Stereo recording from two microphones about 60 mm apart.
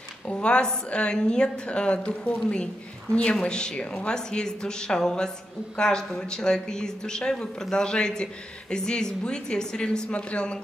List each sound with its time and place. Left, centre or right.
0.3 s speech: centre